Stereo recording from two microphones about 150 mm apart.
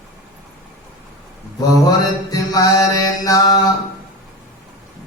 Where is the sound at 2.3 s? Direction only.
20° left (ahead or behind).